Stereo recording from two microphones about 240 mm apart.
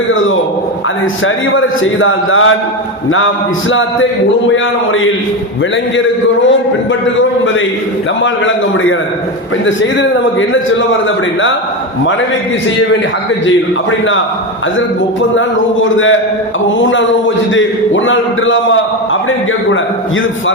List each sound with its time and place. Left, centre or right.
1.2 s a man's voice: left
8.2 s a man's voice: left
16.6 s a man's voice: left